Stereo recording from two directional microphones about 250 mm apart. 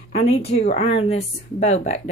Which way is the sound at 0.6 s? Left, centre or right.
Left.